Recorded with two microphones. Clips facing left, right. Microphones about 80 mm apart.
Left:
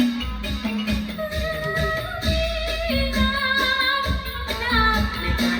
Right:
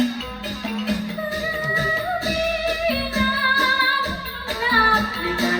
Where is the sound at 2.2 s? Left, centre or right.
Right.